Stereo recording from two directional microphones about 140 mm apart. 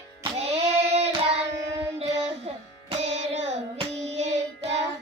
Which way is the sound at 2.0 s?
50° right (ahead or behind).